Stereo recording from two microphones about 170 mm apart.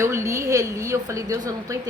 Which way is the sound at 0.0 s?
15° right (ahead or behind).